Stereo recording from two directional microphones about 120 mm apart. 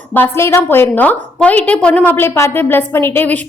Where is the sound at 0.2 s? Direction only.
20° left (ahead or behind).